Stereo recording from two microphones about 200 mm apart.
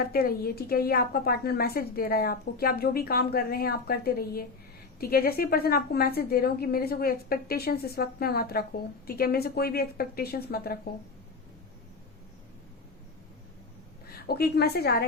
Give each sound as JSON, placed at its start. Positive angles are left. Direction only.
{"t": 0.0, "sound": "a woman's voice", "side_deg": 50}
{"t": 14.1, "sound": "a woman's voice", "side_deg": 50}